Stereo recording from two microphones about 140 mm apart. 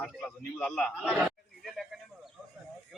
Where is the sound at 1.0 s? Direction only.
5° right (ahead or behind).